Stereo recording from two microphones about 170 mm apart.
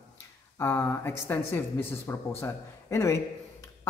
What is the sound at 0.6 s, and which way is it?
Speech, 15° left (ahead or behind).